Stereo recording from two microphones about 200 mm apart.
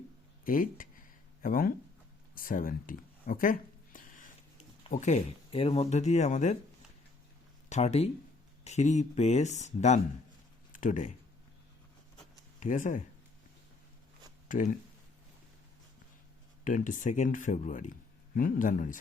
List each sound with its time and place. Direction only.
0.4 s a sound: 45° left (ahead or behind)
4.9 s speech: 35° left (ahead or behind)
7.7 s speech: 35° left (ahead or behind)
10.7 s a sound: 40° left (ahead or behind)
12.5 s speech: 40° left (ahead or behind)
14.4 s speech: 40° left (ahead or behind)
16.6 s speech: 40° left (ahead or behind)